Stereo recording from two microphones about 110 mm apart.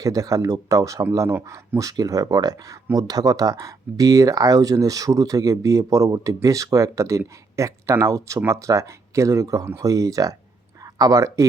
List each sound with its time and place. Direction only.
0.0 s speech: 30° right (ahead or behind)